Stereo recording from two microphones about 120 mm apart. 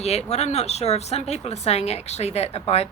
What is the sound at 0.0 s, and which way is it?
Speech, 65° left (ahead or behind).